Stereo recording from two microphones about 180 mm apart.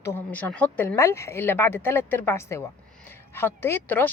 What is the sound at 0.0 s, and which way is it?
Speech, 10° left (ahead or behind).